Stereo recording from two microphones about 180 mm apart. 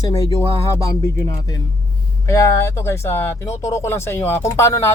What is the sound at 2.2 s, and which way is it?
Speech, 15° left (ahead or behind).